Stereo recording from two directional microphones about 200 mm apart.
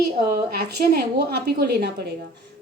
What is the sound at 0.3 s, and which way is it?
A woman's voice, 50° right (ahead or behind).